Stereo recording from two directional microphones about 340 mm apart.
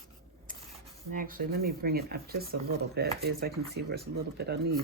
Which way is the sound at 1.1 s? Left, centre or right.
Right.